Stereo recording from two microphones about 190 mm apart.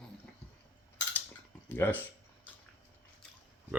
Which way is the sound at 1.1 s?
10° left (ahead or behind).